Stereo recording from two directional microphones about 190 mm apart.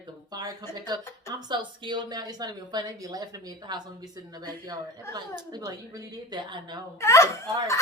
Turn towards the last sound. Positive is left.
turn(degrees=15)  # may be behind; listen again after turning